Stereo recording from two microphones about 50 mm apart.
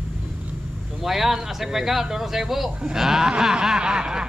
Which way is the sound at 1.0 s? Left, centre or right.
Centre.